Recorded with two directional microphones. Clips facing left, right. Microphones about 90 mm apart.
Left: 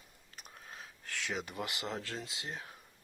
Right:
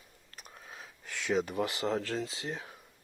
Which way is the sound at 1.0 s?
20° right (ahead or behind).